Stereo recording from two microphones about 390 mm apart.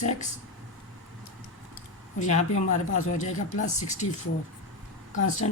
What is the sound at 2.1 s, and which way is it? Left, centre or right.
A man's voice, centre.